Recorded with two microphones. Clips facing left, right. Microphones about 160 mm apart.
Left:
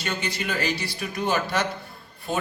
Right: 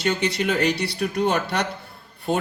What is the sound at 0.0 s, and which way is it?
Speech, 70° right (ahead or behind).